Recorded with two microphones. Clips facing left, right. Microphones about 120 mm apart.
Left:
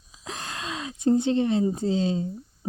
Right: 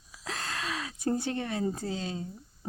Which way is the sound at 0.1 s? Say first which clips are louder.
Left 1 dB; 20° left (ahead or behind).